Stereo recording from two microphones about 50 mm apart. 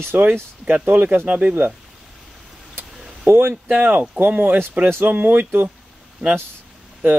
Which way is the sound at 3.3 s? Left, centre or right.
Right.